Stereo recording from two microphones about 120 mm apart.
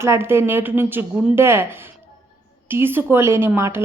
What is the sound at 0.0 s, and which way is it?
A woman's voice, 20° right (ahead or behind).